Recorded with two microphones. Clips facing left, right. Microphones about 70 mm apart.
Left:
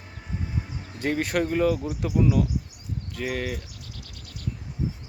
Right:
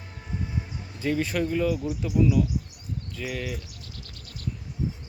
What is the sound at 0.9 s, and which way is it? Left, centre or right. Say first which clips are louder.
Speech: left 1 dB; left.